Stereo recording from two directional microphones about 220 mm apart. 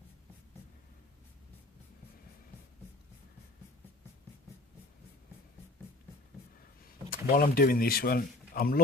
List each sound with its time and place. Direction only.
6.8 s speech: 40° left (ahead or behind)